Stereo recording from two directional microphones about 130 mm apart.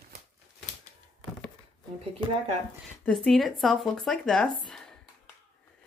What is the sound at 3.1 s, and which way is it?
Speech, centre (ahead or behind).